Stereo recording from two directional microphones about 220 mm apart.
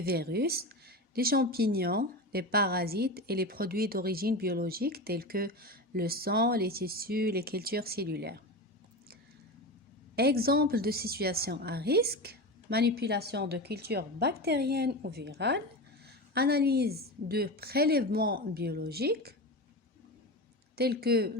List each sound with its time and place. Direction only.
0.0 s speech: 45° right (ahead or behind)
10.2 s speech: 45° right (ahead or behind)
20.7 s speech: 45° right (ahead or behind)